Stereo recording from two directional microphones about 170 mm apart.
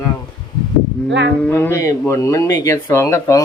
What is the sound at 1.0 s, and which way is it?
Speech, 90° right.